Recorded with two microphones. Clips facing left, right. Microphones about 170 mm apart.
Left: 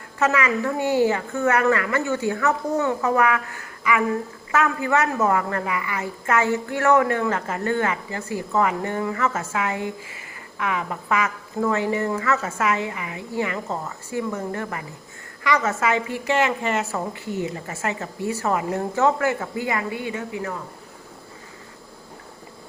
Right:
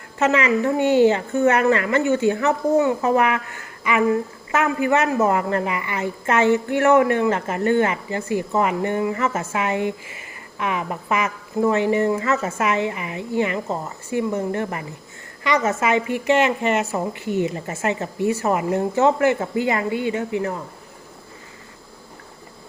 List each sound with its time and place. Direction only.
0.2 s a woman's voice: 25° right (ahead or behind)